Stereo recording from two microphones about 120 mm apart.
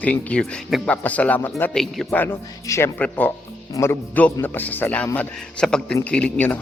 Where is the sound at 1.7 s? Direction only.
Centre (ahead or behind).